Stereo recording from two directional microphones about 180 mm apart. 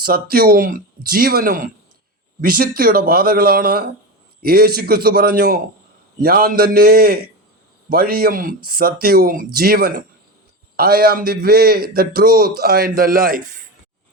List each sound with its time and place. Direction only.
0.0 s a man's voice: 55° right (ahead or behind)